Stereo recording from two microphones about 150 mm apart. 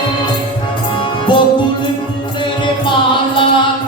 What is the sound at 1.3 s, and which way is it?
Music, 35° left (ahead or behind).